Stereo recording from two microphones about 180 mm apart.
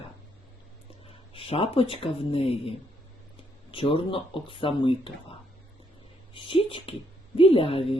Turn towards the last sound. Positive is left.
turn(degrees=30)  # may be behind; listen again after turning